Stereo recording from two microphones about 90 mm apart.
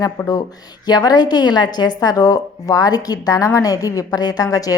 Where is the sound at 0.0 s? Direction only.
45° left (ahead or behind).